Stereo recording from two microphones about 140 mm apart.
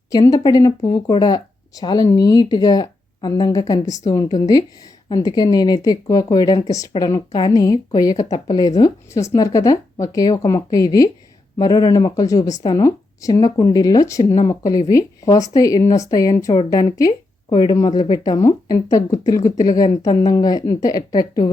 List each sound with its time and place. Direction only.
0.1 s speech: 25° left (ahead or behind)